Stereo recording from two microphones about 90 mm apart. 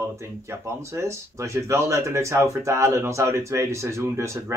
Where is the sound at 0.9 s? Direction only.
35° right (ahead or behind).